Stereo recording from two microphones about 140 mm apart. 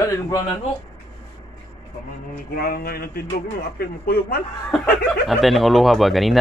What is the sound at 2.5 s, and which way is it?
Speech, 90° left.